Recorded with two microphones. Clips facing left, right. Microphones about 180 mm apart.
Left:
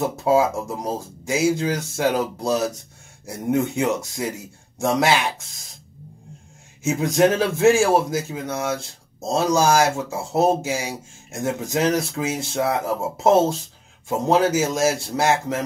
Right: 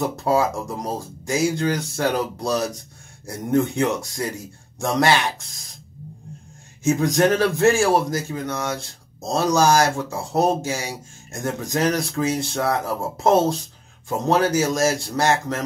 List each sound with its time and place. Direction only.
0.0 s speech: 5° left (ahead or behind)
6.8 s speech: 10° left (ahead or behind)